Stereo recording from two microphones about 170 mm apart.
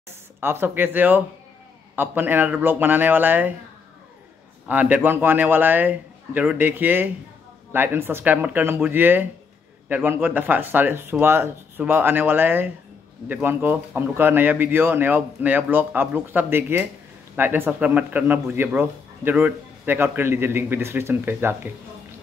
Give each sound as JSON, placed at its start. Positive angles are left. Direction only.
{"t": 0.4, "sound": "speech", "side_deg": -10}
{"t": 4.6, "sound": "speech", "side_deg": -10}